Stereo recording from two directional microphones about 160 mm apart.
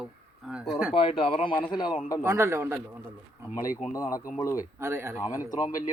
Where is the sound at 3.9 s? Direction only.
20° left (ahead or behind).